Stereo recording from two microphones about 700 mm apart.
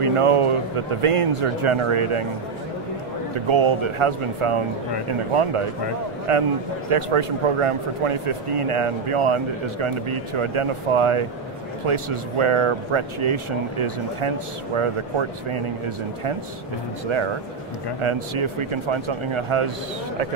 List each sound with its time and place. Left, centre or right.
0.0 s speech: right
3.3 s speech: right
18.0 s speech: right